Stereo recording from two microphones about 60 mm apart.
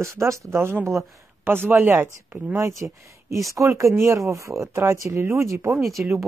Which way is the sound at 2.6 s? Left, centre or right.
Right.